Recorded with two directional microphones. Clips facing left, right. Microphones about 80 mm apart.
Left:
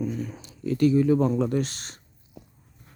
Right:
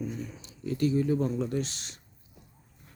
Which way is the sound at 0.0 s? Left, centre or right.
Left.